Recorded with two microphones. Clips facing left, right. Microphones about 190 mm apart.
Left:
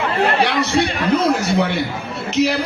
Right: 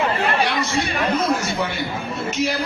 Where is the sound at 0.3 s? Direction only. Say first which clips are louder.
Left 4 dB; 70° left (ahead or behind).